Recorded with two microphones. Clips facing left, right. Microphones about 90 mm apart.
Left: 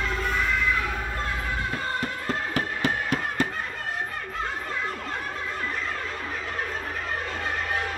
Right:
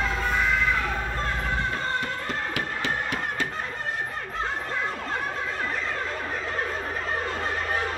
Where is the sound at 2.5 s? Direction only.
45° left (ahead or behind).